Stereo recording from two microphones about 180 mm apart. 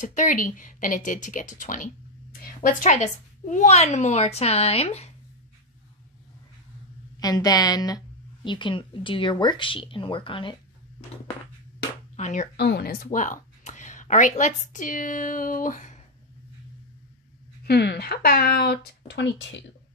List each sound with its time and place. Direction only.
0.0 s a woman's voice: 45° left (ahead or behind)
7.2 s speech: 20° left (ahead or behind)
12.2 s speech: 45° left (ahead or behind)
12.5 s speech: 65° left (ahead or behind); by 16.0 s 45° left (ahead or behind)
17.6 s speech: 65° left (ahead or behind)